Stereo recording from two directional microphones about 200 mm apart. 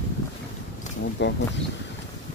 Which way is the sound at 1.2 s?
65° left (ahead or behind).